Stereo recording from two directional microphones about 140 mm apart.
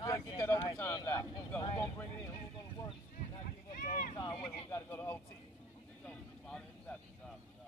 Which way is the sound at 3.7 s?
70° left (ahead or behind).